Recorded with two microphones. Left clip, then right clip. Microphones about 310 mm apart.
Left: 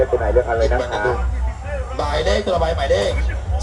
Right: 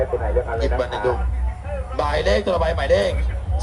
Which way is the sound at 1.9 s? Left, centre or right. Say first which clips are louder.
Even; right.